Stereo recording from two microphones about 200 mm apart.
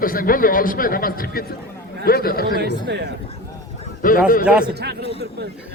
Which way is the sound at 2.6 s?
55° right (ahead or behind).